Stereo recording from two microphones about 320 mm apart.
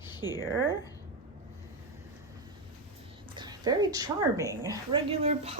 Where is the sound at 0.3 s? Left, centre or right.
Centre.